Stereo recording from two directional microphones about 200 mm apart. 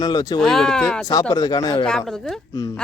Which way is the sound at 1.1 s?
20° left (ahead or behind).